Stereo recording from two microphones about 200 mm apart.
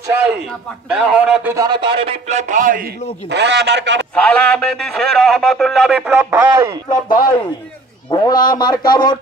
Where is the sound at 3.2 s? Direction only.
60° right (ahead or behind).